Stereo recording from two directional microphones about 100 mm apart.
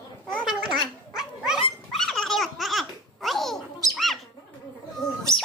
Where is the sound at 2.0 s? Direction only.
5° left (ahead or behind).